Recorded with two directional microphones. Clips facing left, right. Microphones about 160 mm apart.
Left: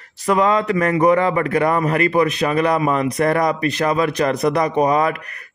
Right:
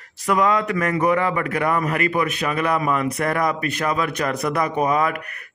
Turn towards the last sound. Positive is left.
turn(degrees=35)  # may be behind; listen again after turning